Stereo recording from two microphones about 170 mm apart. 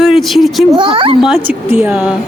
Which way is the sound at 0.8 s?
30° right (ahead or behind).